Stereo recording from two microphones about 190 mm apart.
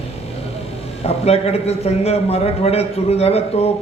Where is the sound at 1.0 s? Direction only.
35° left (ahead or behind).